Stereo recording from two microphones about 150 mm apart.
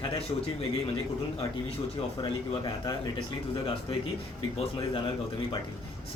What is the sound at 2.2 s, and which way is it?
A man's voice, 30° left (ahead or behind).